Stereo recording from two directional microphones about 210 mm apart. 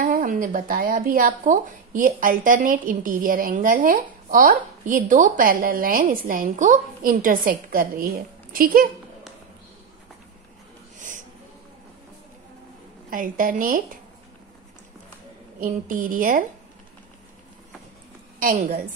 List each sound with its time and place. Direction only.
0.0 s speech: 40° right (ahead or behind)
11.0 s snort: 35° right (ahead or behind)
13.1 s speech: 40° right (ahead or behind)
15.6 s speech: 40° right (ahead or behind)
18.4 s a woman's voice: 40° right (ahead or behind)